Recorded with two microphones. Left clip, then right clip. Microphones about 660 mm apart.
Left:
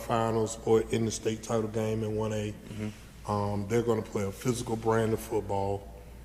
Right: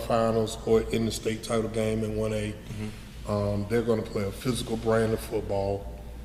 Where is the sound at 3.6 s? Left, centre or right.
Left.